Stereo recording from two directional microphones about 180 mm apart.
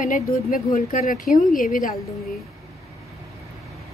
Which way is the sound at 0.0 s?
45° left (ahead or behind).